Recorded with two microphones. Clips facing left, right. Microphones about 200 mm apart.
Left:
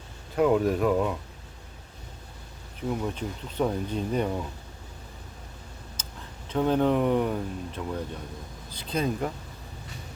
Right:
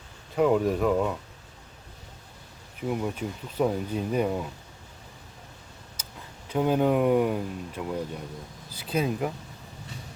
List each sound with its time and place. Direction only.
0.3 s speech: centre (ahead or behind)
2.9 s speech: 10° right (ahead or behind)
6.5 s speech: 10° right (ahead or behind)